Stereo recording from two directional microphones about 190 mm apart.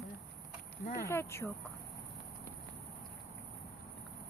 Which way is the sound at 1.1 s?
15° left (ahead or behind).